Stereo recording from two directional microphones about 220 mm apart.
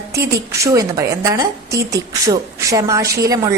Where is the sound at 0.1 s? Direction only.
15° right (ahead or behind).